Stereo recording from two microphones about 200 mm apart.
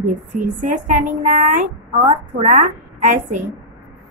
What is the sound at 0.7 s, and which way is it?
Speech, 35° right (ahead or behind).